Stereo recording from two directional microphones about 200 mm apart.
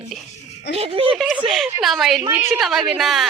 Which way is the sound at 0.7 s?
30° right (ahead or behind).